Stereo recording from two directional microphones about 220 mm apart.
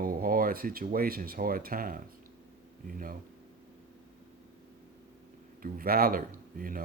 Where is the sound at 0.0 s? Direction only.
40° right (ahead or behind).